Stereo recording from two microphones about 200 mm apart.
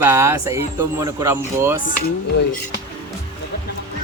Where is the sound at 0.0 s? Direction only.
15° right (ahead or behind).